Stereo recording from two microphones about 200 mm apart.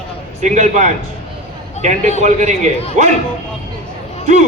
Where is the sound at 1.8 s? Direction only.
35° left (ahead or behind).